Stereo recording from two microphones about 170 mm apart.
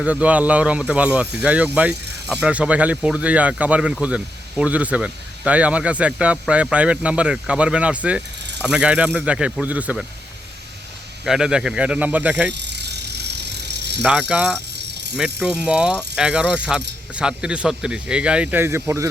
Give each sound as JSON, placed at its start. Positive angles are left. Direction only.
{"t": 0.0, "sound": "speech", "side_deg": -10}
{"t": 11.3, "sound": "speech", "side_deg": -5}
{"t": 12.5, "sound": "bicycle", "side_deg": -90}
{"t": 14.0, "sound": "speech", "side_deg": -5}
{"t": 14.8, "sound": "vehicle", "side_deg": -85}
{"t": 15.2, "sound": "speech", "side_deg": -5}